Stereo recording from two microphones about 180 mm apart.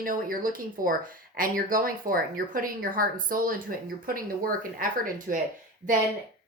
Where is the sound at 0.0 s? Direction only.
50° right (ahead or behind).